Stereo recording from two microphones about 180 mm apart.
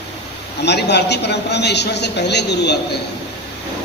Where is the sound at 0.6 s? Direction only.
70° left (ahead or behind).